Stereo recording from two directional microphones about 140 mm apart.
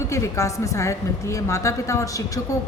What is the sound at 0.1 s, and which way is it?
A woman's voice, 20° left (ahead or behind).